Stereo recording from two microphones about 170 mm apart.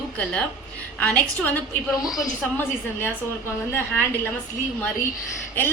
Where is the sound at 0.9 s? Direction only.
10° left (ahead or behind).